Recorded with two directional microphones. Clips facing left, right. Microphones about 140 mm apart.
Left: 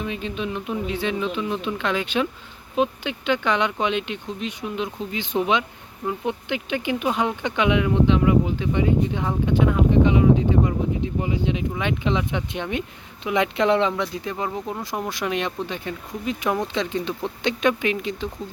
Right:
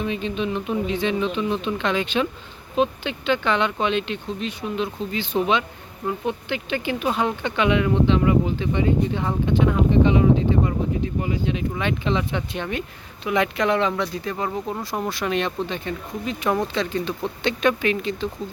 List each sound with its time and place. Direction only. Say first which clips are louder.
0.0 s speech: right 3 dB; 5° left (ahead or behind)
11.0 s speech: even; 20° left (ahead or behind)